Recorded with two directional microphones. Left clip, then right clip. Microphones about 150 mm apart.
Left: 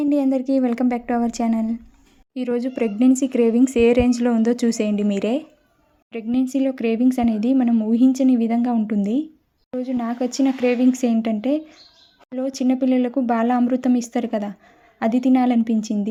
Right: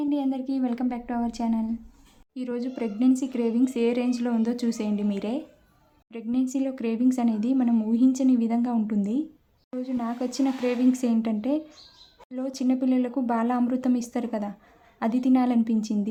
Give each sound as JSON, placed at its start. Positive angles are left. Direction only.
{"t": 0.0, "sound": "a woman's voice", "side_deg": 50}
{"t": 2.3, "sound": "speech", "side_deg": 35}
{"t": 6.1, "sound": "speech", "side_deg": 30}